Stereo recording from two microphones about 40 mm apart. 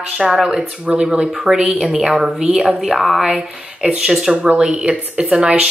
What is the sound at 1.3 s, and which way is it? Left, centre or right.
Speech, centre.